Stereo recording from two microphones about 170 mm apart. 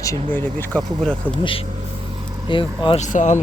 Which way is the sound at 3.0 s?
45° left (ahead or behind).